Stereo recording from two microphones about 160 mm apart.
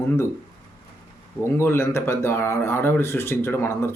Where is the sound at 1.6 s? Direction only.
15° left (ahead or behind).